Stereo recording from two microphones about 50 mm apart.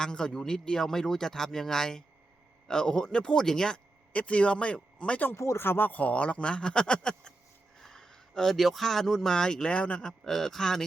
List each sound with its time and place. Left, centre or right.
0.0 s speech: centre
4.1 s speech: left
5.5 s a man's voice: left; by 9.7 s centre
9.7 s speech: left
10.1 s speech: centre